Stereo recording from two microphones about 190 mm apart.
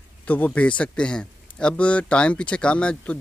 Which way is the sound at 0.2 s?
5° left (ahead or behind).